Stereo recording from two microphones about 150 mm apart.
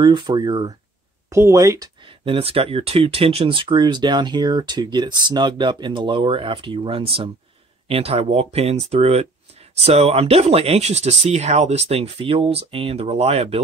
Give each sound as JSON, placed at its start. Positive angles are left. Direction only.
{"t": 0.0, "sound": "speech", "side_deg": -30}
{"t": 2.0, "sound": "speech", "side_deg": -35}